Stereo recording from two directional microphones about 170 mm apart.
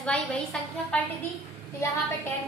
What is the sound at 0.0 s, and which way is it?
Speech, 5° left (ahead or behind).